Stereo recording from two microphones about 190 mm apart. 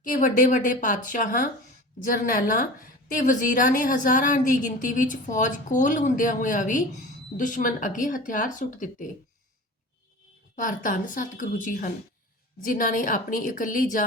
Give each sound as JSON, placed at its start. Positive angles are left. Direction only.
{"t": 0.0, "sound": "a woman's voice", "side_deg": 45}
{"t": 10.5, "sound": "a woman's voice", "side_deg": 45}